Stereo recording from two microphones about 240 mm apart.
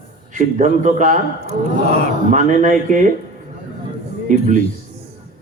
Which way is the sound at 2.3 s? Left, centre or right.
Right.